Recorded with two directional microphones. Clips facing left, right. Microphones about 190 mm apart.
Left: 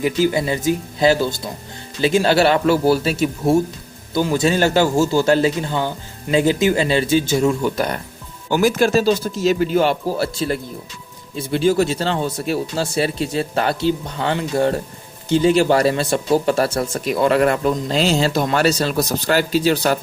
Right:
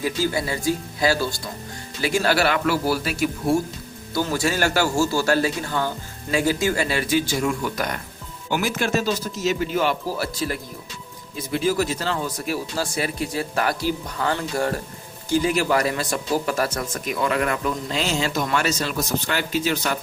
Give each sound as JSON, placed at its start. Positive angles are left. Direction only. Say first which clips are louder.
{"t": 0.0, "sound": "speech", "louder": "left 6 dB", "side_deg": 20}
{"t": 8.4, "sound": "speech", "louder": "left 7 dB", "side_deg": 40}